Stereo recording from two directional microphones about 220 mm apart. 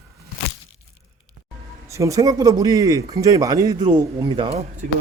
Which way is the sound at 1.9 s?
15° right (ahead or behind).